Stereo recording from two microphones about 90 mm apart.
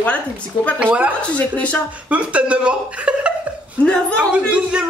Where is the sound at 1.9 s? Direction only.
15° right (ahead or behind).